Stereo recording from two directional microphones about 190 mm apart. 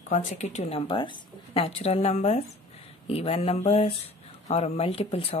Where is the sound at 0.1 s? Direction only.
40° left (ahead or behind).